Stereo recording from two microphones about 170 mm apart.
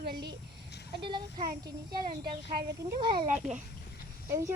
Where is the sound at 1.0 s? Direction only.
25° right (ahead or behind).